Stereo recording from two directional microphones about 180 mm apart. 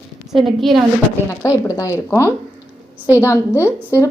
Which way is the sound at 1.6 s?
15° left (ahead or behind).